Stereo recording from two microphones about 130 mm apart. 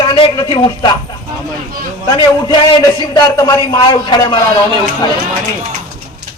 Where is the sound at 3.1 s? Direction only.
30° left (ahead or behind).